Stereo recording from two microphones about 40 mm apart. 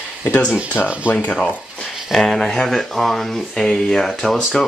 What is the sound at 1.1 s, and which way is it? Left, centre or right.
Speech, left.